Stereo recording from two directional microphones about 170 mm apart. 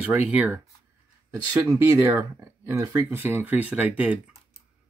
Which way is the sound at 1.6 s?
20° right (ahead or behind).